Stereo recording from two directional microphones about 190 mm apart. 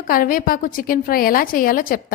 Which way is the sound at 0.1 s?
45° left (ahead or behind).